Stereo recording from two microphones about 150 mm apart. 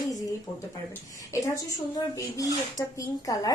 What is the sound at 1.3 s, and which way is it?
A woman's voice, 20° left (ahead or behind).